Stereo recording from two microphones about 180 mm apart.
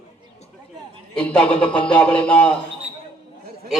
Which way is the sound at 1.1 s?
5° left (ahead or behind).